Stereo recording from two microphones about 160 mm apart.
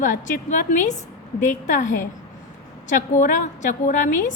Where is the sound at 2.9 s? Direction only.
55° left (ahead or behind).